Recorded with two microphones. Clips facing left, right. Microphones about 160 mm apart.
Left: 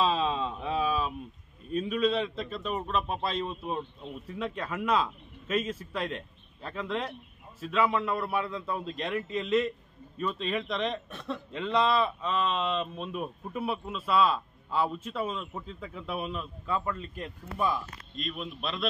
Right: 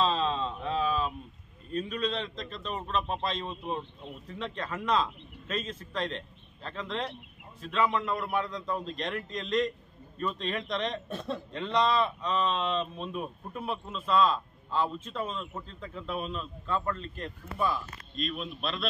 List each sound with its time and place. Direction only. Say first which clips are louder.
0.0 s a sound: left 1 dB; 10° left (ahead or behind)
1.7 s a man's voice: left 4 dB; 5° left (ahead or behind)
11.1 s speech: right 2 dB; 35° right (ahead or behind)
11.5 s a man's voice: left 1 dB; 5° left (ahead or behind)